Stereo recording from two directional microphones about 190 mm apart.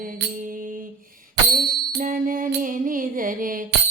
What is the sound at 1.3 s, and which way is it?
Music, 55° right (ahead or behind).